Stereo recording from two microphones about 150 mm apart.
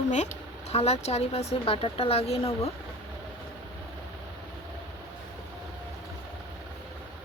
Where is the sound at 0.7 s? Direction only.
45° left (ahead or behind).